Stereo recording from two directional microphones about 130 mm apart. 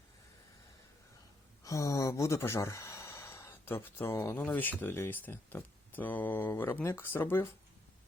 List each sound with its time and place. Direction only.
1.6 s speech: 25° left (ahead or behind)